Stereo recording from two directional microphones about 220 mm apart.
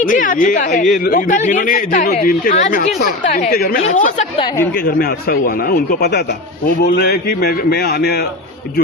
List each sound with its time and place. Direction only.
0.0 s speech: 35° left (ahead or behind)
4.5 s speech: 10° left (ahead or behind)
4.8 s speech: 40° left (ahead or behind)